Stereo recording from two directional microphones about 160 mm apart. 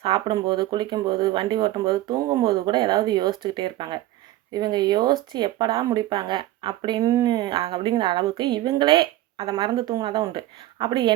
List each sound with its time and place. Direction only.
0.0 s a woman's voice: 35° right (ahead or behind)